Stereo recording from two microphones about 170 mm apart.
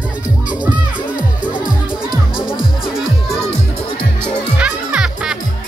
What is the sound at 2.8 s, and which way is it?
Music, centre (ahead or behind).